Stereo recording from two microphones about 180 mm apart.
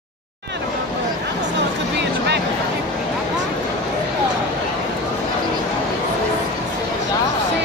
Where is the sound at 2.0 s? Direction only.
70° right (ahead or behind).